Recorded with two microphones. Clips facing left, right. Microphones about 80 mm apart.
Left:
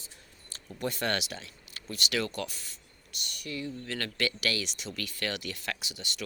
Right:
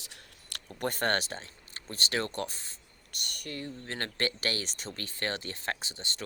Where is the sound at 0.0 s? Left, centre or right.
Right.